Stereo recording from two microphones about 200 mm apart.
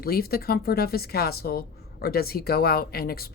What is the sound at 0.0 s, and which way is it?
Speech, 50° left (ahead or behind).